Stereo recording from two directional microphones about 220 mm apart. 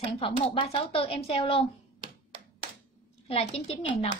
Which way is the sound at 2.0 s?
25° right (ahead or behind).